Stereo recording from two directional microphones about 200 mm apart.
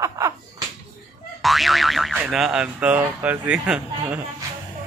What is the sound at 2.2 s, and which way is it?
Speech, 5° right (ahead or behind).